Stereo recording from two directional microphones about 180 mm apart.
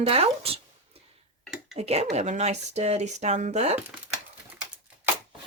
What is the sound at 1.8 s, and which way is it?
Speech, 35° right (ahead or behind).